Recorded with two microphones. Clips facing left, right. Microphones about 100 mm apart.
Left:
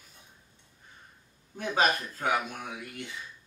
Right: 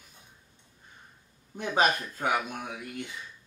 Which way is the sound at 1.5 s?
20° right (ahead or behind).